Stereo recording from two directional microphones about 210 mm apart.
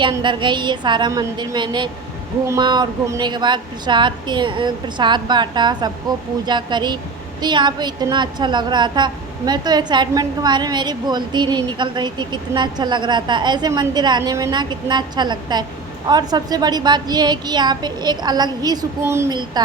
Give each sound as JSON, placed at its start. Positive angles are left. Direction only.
{"t": 0.0, "sound": "a woman's voice", "side_deg": -20}